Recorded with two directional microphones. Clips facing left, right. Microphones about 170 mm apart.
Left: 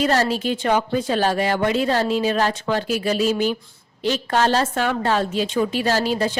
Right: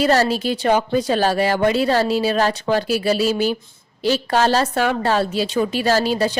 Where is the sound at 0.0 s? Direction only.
35° right (ahead or behind).